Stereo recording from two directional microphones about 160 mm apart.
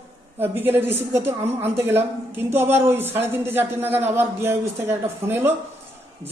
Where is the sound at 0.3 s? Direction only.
15° right (ahead or behind).